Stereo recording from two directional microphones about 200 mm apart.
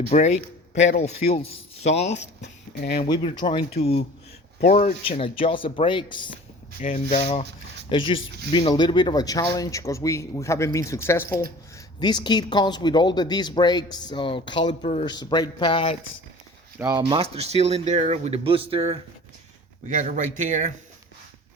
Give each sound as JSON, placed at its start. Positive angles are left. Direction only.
{"t": 0.1, "sound": "speech", "side_deg": 35}
{"t": 14.8, "sound": "speech", "side_deg": 35}
{"t": 15.0, "sound": "speech", "side_deg": 20}
{"t": 16.7, "sound": "speech", "side_deg": -15}
{"t": 17.0, "sound": "speech", "side_deg": -30}
{"t": 19.9, "sound": "speech", "side_deg": -40}